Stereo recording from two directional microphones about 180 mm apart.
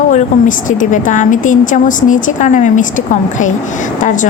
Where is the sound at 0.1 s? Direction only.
45° left (ahead or behind).